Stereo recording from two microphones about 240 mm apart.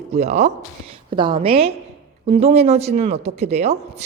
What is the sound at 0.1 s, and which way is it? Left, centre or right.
Speech, right.